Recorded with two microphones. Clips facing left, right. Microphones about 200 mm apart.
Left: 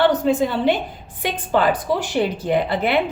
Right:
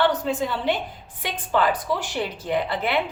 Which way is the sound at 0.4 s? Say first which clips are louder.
Left 6 dB; 20° left (ahead or behind).